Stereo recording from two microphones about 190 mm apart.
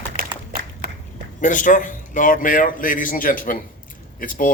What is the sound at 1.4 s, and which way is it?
A man's voice, 45° left (ahead or behind).